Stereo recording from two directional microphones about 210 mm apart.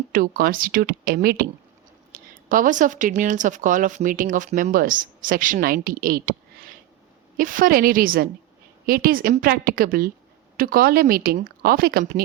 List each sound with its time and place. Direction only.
0.1 s speech: 45° right (ahead or behind)
7.3 s speech: 40° right (ahead or behind)